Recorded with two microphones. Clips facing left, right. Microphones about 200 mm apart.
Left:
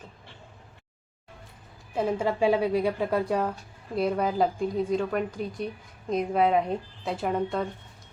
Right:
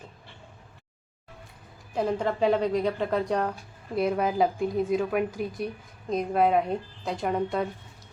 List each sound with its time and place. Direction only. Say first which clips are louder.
2.0 s a woman's voice: even; 5° left (ahead or behind)